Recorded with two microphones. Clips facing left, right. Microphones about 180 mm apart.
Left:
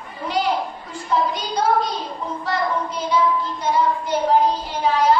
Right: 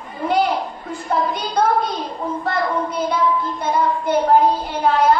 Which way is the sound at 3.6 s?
55° right (ahead or behind).